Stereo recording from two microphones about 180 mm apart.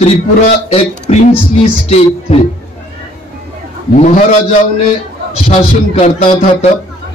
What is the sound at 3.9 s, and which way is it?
Speech, 40° left (ahead or behind).